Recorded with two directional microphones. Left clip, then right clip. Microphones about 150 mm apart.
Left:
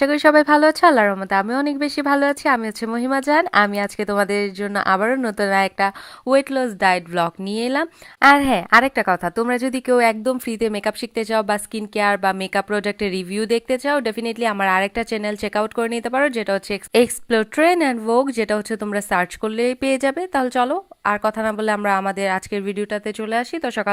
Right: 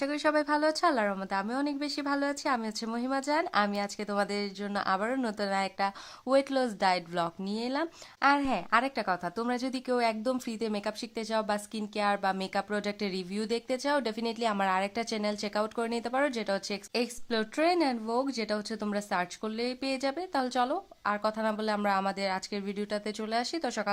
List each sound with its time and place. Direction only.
0.0 s a woman's voice: 35° left (ahead or behind)
16.9 s a woman's voice: 35° left (ahead or behind)